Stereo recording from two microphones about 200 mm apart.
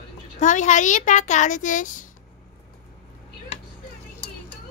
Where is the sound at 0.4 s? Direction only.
35° left (ahead or behind).